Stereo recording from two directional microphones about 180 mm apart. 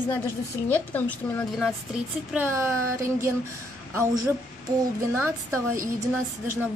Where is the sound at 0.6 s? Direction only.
10° left (ahead or behind).